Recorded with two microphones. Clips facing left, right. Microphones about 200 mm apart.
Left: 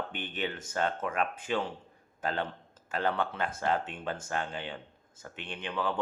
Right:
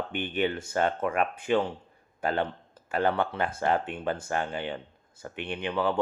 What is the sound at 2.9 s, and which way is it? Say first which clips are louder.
Speech: right 5 dB; 60° right (ahead or behind).